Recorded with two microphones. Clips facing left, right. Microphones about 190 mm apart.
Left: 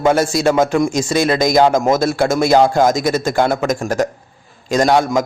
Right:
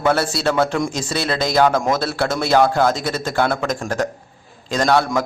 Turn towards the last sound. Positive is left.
turn(degrees=15)  # may be behind; listen again after turning